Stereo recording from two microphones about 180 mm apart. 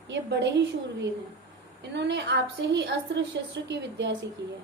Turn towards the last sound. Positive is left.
turn(degrees=-70)  # may be behind; listen again after turning